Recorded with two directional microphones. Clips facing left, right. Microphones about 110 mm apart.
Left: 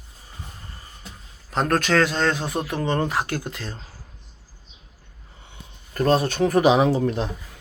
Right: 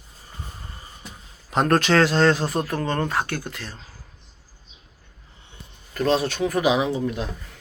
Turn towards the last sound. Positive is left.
turn(degrees=35)  # may be behind; listen again after turning